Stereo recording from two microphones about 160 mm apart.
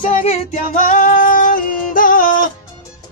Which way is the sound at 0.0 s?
45° left (ahead or behind).